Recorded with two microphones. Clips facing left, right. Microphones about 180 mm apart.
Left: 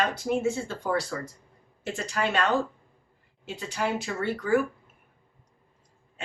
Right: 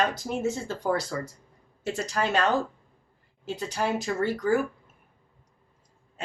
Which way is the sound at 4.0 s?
40° right (ahead or behind).